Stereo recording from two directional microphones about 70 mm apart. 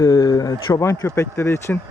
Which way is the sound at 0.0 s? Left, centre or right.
Left.